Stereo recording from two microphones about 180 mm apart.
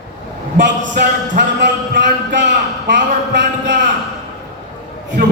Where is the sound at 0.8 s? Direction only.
75° right (ahead or behind).